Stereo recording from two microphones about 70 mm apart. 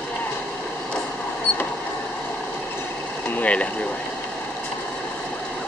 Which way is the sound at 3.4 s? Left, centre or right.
Centre.